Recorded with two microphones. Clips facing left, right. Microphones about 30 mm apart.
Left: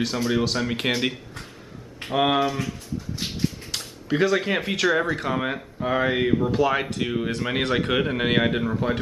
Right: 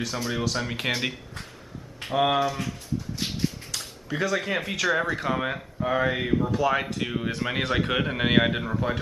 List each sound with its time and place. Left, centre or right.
0.0 s speech: centre
2.1 s speech: centre
3.7 s a man's voice: left; by 8.7 s centre
8.7 s speech: centre